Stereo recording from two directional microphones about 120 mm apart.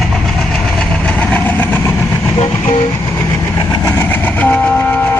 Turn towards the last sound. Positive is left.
turn(degrees=15)  # may be behind; listen again after turning